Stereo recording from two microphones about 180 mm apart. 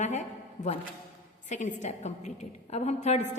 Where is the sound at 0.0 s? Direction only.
40° left (ahead or behind).